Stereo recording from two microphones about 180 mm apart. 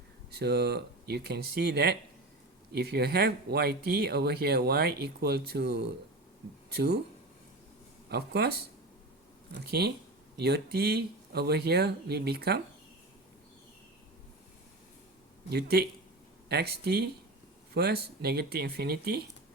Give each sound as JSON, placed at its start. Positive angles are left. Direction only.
{"t": 0.3, "sound": "speech", "side_deg": -65}
{"t": 8.1, "sound": "speech", "side_deg": -60}
{"t": 15.4, "sound": "speech", "side_deg": -60}